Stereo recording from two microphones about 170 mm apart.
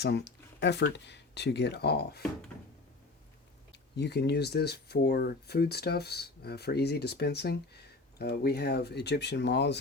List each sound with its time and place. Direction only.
0.0 s speech: 75° left (ahead or behind)
3.7 s speech: 80° left